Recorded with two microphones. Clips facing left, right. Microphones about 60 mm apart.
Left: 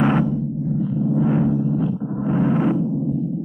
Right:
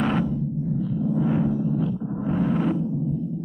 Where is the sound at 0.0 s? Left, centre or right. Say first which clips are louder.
Left 5 dB; centre.